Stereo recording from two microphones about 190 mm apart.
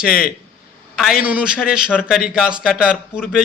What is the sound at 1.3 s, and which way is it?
A man's voice, 5° right (ahead or behind).